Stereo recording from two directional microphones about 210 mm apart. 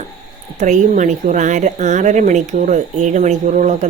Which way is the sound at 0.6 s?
35° right (ahead or behind).